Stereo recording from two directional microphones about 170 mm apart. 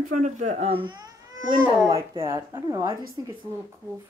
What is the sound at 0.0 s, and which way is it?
Speech, 45° right (ahead or behind).